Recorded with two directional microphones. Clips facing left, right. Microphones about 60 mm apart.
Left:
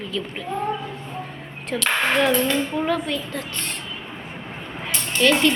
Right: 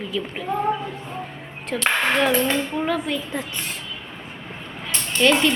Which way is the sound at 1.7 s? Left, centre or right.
Centre.